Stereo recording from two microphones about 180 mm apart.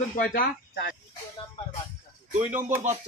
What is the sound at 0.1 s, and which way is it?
Speech, 50° left (ahead or behind).